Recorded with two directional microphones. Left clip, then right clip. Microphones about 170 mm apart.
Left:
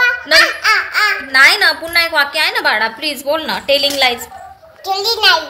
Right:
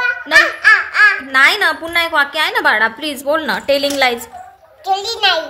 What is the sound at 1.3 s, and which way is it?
A woman's voice, 20° right (ahead or behind).